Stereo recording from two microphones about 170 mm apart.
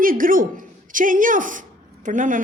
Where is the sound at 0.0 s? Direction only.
55° right (ahead or behind).